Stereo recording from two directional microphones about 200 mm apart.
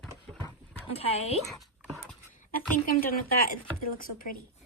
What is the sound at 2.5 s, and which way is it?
Speech, 45° left (ahead or behind).